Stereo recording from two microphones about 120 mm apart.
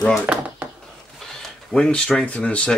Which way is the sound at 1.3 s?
5° left (ahead or behind).